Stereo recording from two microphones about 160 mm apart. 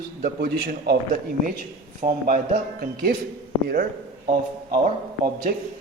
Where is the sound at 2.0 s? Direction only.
60° right (ahead or behind).